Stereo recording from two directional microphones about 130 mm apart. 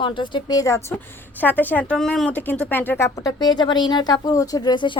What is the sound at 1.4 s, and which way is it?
Speech, 15° left (ahead or behind).